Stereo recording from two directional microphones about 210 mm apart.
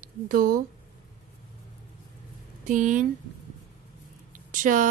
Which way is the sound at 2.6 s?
40° right (ahead or behind).